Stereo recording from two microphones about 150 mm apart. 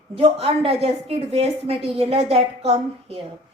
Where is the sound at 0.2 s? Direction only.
40° right (ahead or behind).